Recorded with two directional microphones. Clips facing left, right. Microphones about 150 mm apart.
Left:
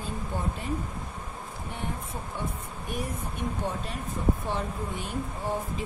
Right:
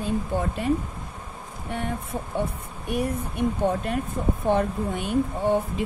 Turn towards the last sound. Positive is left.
turn(degrees=-65)  # may be behind; listen again after turning